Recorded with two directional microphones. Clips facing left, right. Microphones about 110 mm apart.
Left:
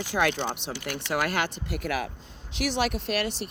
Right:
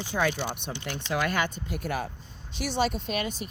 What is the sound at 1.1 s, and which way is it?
Speech, 65° left (ahead or behind).